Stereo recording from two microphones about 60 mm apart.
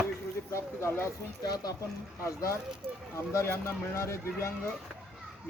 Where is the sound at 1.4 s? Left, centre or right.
Left.